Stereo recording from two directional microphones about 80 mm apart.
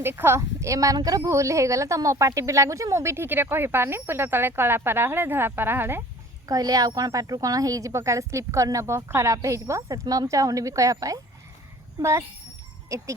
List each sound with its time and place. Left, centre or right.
0.0 s a woman's voice: right
6.4 s a woman's voice: right